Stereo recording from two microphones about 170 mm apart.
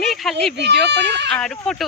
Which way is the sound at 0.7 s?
90° right.